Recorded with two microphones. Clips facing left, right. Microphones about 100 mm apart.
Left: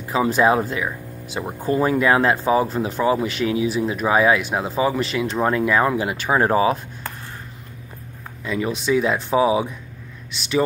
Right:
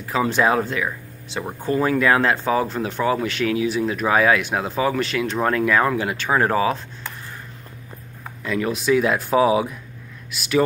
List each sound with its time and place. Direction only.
0.1 s speech: 5° left (ahead or behind)
1.9 s speech: 15° left (ahead or behind)
2.6 s speech: centre (ahead or behind)
5.4 s speech: 15° left (ahead or behind)
6.3 s speech: 20° left (ahead or behind)
8.4 s speech: centre (ahead or behind)